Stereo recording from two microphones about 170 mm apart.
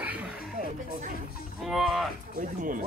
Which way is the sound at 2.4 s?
50° right (ahead or behind).